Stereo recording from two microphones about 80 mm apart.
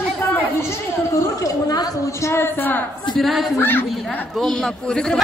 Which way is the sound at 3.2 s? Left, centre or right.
Centre.